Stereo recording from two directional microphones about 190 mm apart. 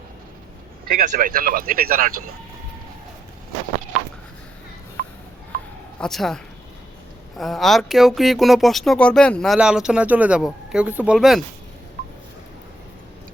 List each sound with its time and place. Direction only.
0.9 s speech: 50° right (ahead or behind)
5.0 s a sound: 50° right (ahead or behind)
6.0 s speech: centre (ahead or behind)